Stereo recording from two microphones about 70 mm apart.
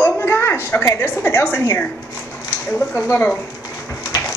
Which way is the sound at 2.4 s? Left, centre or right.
Left.